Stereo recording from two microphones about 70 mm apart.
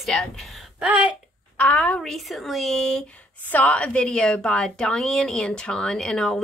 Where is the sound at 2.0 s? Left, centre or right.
Centre.